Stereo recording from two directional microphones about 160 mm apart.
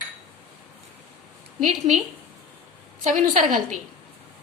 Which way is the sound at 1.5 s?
45° right (ahead or behind).